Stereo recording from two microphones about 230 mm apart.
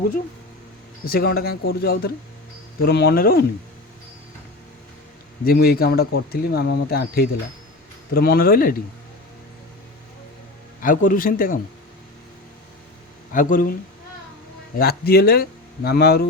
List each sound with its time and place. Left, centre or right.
1.0 s speech: left
5.5 s speech: left
10.8 s speech: left
13.3 s speech: left
14.8 s speech: left